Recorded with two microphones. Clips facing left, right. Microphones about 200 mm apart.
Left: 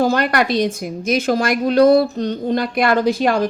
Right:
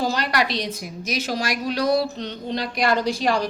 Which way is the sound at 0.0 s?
55° left (ahead or behind).